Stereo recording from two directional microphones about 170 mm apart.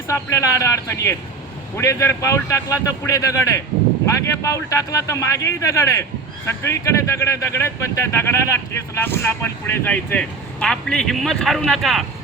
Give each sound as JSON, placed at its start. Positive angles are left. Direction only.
{"t": 0.1, "sound": "speech", "side_deg": 15}